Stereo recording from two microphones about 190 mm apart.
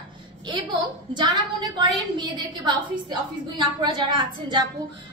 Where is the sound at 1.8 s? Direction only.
25° right (ahead or behind).